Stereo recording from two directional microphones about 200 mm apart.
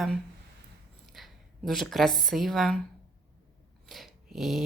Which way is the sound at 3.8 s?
Centre (ahead or behind).